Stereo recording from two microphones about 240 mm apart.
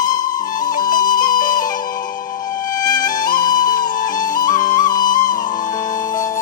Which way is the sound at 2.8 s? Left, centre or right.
Centre.